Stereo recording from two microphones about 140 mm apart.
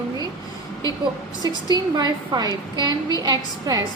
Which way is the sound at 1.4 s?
30° right (ahead or behind).